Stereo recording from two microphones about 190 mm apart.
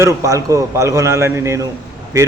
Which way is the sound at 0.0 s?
15° right (ahead or behind).